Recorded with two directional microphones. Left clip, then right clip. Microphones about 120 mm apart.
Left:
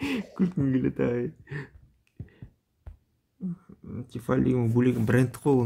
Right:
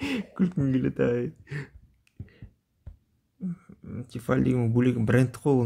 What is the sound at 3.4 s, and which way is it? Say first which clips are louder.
Speech: even; 30° right (ahead or behind).